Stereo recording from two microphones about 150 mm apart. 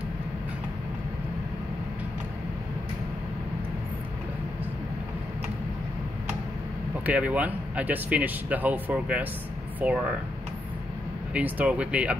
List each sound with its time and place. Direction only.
7.1 s speech: 10° right (ahead or behind)
11.3 s speech: 10° right (ahead or behind)